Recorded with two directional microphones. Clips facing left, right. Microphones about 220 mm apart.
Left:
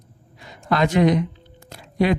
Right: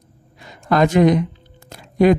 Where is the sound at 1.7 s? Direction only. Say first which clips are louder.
Right 6 dB; 45° right (ahead or behind).